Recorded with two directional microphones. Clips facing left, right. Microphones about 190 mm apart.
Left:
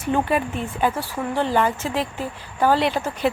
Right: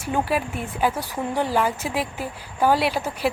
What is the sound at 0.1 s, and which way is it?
A woman's voice, 5° right (ahead or behind).